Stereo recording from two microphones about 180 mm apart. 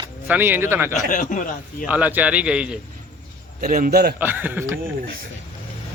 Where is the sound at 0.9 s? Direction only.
45° left (ahead or behind).